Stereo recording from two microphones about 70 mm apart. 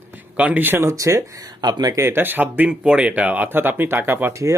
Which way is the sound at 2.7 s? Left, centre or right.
Centre.